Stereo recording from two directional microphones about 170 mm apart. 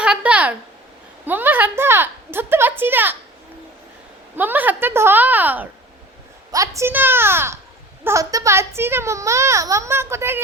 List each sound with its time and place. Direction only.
0.0 s a sound: 5° right (ahead or behind)
1.2 s a child's voice: 10° right (ahead or behind)
4.4 s a child's voice: 10° right (ahead or behind)